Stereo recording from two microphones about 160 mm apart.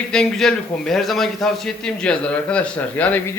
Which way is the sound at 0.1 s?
5° left (ahead or behind).